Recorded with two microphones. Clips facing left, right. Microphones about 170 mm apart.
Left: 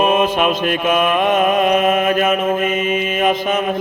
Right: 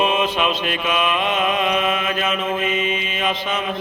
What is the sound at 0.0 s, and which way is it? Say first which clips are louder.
Mantra: left 5 dB; 50° left (ahead or behind).